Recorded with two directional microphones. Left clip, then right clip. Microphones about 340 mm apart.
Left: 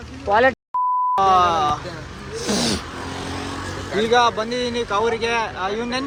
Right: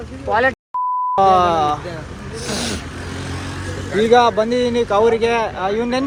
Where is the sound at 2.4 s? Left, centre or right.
Left.